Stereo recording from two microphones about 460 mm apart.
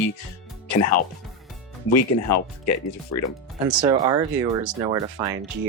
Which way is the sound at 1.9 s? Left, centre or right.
Left.